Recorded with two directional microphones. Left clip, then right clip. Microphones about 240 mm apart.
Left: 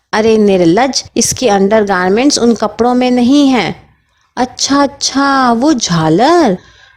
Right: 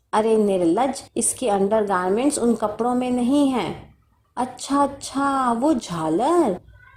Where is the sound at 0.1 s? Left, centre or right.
Left.